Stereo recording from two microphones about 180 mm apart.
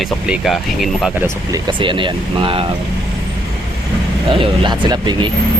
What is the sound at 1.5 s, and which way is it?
Speech, 25° right (ahead or behind).